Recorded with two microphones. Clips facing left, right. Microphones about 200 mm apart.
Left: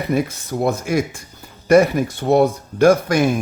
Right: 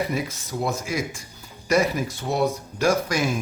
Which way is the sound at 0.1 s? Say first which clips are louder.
Left 8 dB; 50° left (ahead or behind).